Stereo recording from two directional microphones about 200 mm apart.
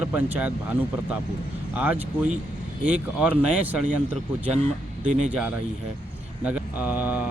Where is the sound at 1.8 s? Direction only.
10° right (ahead or behind).